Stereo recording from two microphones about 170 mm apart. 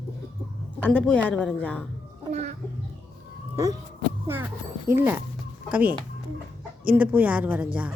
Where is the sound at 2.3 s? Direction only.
45° right (ahead or behind).